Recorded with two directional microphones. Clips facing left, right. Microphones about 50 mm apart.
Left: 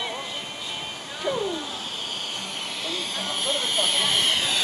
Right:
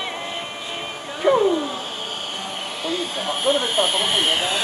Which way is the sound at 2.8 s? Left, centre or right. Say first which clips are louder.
Right 7 dB; centre.